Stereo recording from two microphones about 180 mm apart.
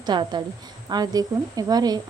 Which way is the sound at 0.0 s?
25° right (ahead or behind).